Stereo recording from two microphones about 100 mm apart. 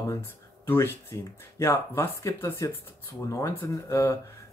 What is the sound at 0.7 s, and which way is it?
Speech, 25° left (ahead or behind).